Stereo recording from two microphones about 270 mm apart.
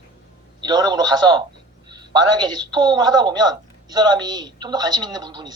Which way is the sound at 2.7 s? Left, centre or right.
Centre.